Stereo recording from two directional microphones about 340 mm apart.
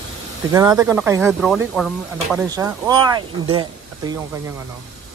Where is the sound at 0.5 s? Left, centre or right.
Centre.